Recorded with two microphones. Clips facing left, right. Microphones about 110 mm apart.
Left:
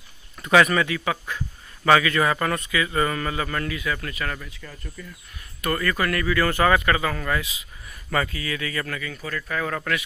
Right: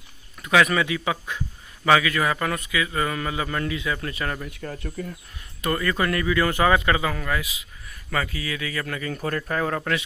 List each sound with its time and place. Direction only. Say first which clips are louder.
0.4 s speech: left 2 dB; centre (ahead or behind)
0.8 s a man's voice: even; 15° right (ahead or behind)
1.9 s a man's voice: left 1 dB; 5° right (ahead or behind); by 4.5 s 30° right (ahead or behind)
4.5 s speech: right 8 dB; 50° right (ahead or behind)
5.0 s speech: right 8 dB; 70° right (ahead or behind)
5.6 s a man's voice: even; 20° right (ahead or behind)
7.2 s a man's voice: left 1 dB; 5° right (ahead or behind)
9.0 s speech: right 5 dB; 45° right (ahead or behind)
9.4 s speech: even; 25° right (ahead or behind)